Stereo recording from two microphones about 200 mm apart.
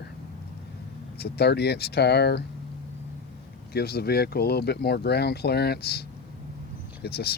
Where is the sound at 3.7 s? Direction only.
50° left (ahead or behind).